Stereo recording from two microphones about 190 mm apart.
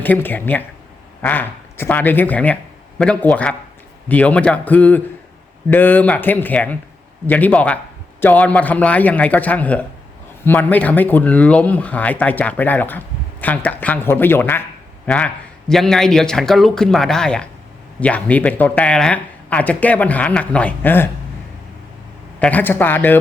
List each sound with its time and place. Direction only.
0.0 s a man's voice: 10° left (ahead or behind)
22.4 s speech: 5° left (ahead or behind)